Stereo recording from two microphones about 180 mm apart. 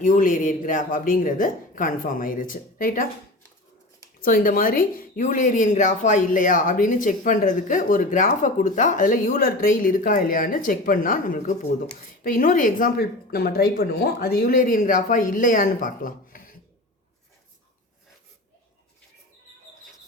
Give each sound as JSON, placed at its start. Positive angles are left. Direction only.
{"t": 0.0, "sound": "speech", "side_deg": 45}
{"t": 4.2, "sound": "speech", "side_deg": 50}